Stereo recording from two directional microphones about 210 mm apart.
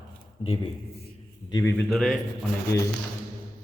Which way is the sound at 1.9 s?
Centre (ahead or behind).